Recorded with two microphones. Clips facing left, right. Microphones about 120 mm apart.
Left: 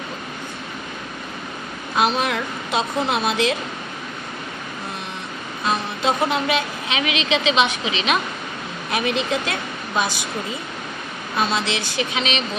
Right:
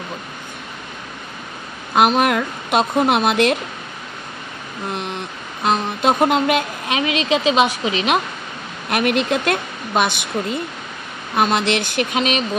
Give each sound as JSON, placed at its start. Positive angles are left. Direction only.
{"t": 2.0, "sound": "speech", "side_deg": -60}
{"t": 5.6, "sound": "vehicle", "side_deg": -60}
{"t": 7.0, "sound": "a woman's voice", "side_deg": -40}
{"t": 8.9, "sound": "speech", "side_deg": -60}